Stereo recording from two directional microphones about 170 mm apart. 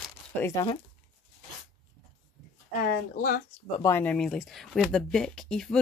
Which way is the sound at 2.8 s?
55° left (ahead or behind).